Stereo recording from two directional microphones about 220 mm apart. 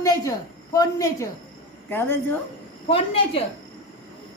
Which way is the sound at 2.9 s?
25° left (ahead or behind).